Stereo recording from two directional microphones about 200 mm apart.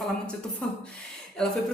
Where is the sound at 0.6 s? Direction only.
5° left (ahead or behind).